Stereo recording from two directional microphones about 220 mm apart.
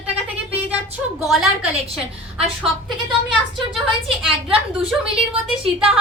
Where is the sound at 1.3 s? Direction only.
Centre (ahead or behind).